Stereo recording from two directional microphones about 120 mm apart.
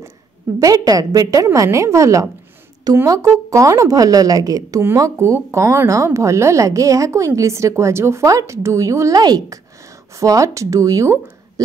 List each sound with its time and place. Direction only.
0.6 s a woman's voice: 30° right (ahead or behind)